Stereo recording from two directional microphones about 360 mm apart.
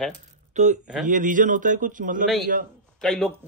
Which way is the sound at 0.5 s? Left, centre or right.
Centre.